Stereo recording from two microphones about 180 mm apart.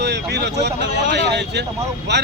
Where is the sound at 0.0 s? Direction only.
70° right (ahead or behind).